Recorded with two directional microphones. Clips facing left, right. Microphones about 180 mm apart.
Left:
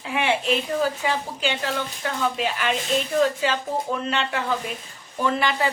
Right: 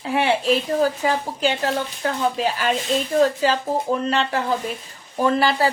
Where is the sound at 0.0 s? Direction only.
35° right (ahead or behind).